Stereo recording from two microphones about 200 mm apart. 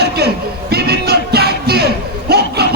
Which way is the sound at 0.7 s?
55° right (ahead or behind).